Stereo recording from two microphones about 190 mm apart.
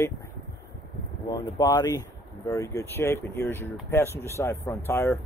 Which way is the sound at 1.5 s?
20° left (ahead or behind).